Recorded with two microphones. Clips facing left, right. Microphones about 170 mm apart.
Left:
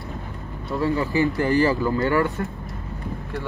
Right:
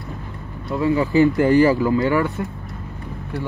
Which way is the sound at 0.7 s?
15° right (ahead or behind).